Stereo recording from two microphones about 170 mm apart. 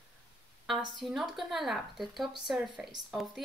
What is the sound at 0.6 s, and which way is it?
Speech, centre (ahead or behind).